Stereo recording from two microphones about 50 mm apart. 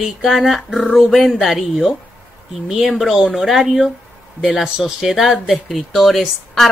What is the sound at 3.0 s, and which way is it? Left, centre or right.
Speech, centre.